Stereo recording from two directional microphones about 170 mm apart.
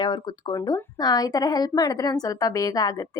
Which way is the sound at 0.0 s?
25° left (ahead or behind).